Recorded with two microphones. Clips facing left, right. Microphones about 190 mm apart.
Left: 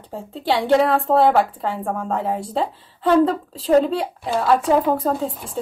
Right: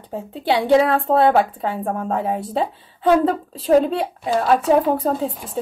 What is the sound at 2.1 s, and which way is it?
A woman's voice, 5° right (ahead or behind).